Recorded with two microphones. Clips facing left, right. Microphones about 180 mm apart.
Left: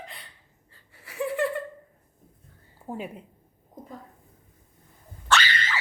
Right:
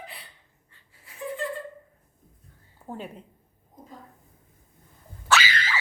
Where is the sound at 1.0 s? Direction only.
75° left (ahead or behind).